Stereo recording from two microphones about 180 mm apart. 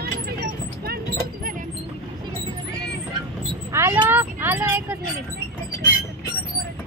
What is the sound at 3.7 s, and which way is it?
Speech, 15° right (ahead or behind).